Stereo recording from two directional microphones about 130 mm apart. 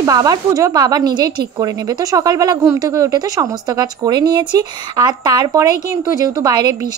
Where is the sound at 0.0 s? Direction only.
30° right (ahead or behind).